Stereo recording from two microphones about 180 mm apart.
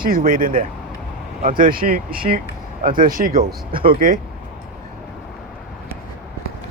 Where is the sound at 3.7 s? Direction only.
30° right (ahead or behind).